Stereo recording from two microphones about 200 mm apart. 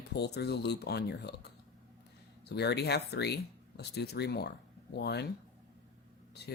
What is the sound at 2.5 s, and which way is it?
Speech, 55° left (ahead or behind).